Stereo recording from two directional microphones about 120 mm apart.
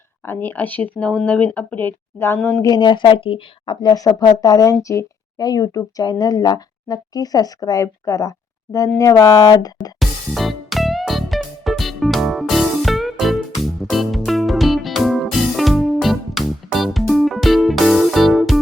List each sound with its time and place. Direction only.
0.3 s speech: 20° left (ahead or behind)
2.6 s speech: 35° left (ahead or behind)
3.8 s speech: 35° left (ahead or behind)
10.0 s music: centre (ahead or behind)